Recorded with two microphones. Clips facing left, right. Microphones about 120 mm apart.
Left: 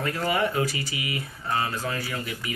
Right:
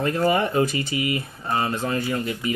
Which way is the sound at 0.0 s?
25° right (ahead or behind).